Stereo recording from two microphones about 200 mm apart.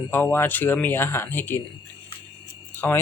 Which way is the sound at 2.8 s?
15° left (ahead or behind).